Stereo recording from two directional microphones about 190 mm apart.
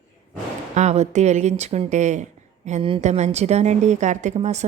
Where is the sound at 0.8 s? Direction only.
35° right (ahead or behind).